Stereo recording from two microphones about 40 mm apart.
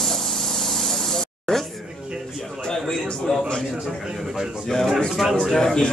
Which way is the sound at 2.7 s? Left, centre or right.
Centre.